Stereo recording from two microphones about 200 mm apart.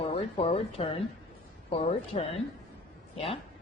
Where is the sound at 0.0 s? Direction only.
30° left (ahead or behind).